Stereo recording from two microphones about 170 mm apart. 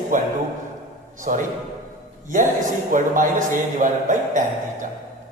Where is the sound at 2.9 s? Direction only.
50° right (ahead or behind).